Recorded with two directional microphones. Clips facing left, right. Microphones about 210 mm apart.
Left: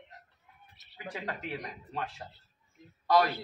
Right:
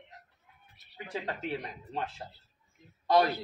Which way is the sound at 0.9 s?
25° right (ahead or behind).